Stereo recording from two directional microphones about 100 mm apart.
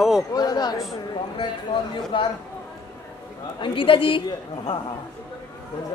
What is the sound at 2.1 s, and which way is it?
Speech, 55° left (ahead or behind).